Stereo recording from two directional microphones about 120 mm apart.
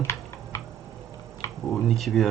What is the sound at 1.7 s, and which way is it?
Computer keyboard, centre (ahead or behind).